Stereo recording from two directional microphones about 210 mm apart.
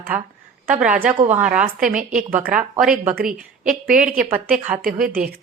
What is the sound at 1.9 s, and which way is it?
Speech, 40° right (ahead or behind).